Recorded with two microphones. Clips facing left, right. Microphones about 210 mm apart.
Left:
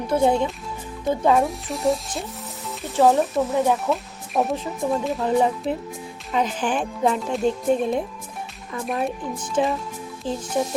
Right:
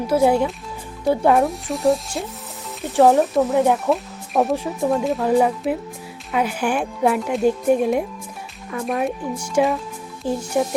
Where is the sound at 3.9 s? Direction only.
Centre (ahead or behind).